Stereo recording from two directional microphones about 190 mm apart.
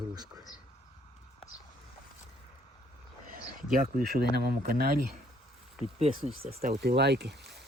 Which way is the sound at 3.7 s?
50° right (ahead or behind).